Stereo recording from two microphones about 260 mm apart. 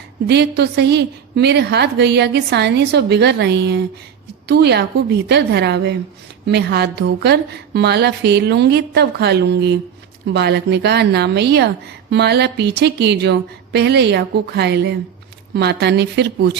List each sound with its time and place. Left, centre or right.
0.3 s a woman's voice: right